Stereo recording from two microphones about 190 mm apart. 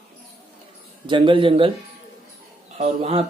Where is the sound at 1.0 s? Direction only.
25° right (ahead or behind).